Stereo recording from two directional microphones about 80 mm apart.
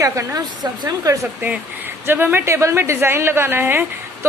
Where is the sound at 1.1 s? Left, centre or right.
Right.